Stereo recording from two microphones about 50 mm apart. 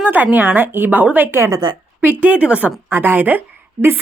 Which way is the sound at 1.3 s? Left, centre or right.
Right.